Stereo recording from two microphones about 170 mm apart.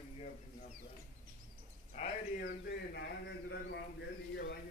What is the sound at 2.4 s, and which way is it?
A man's voice, 80° left.